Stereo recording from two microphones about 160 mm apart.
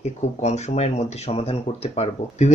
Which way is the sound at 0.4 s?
45° left (ahead or behind).